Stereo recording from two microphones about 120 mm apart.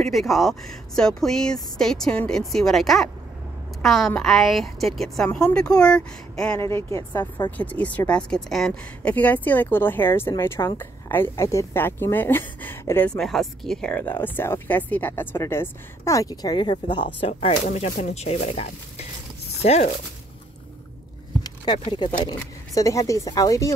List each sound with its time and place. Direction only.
0.0 s speech: centre (ahead or behind); by 13.1 s 15° left (ahead or behind)
13.1 s speech: centre (ahead or behind)
13.9 s speech: 15° left (ahead or behind); by 17.3 s 40° left (ahead or behind)
17.3 s speech: 55° left (ahead or behind)
17.6 s speech: 70° left (ahead or behind)
21.7 s speech: 45° left (ahead or behind)
22.8 s speech: 25° left (ahead or behind)